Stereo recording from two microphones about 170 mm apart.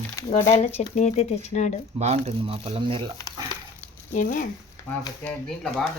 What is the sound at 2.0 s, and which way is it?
Speech, 40° right (ahead or behind).